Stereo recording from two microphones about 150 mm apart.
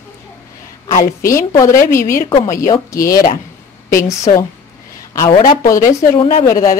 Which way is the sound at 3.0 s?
75° left (ahead or behind).